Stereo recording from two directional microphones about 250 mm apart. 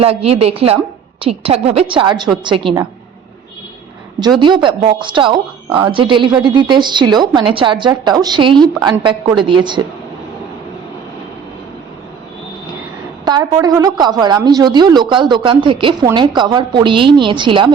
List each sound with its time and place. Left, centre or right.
0.0 s a woman's voice: right
4.4 s a woman's voice: centre
13.2 s a woman's voice: centre